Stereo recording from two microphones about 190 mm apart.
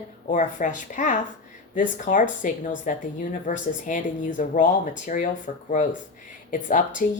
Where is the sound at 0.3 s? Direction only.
40° left (ahead or behind).